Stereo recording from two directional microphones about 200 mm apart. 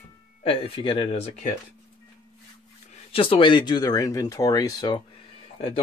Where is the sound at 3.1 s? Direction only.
25° left (ahead or behind).